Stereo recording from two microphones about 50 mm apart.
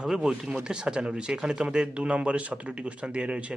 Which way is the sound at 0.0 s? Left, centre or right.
Centre.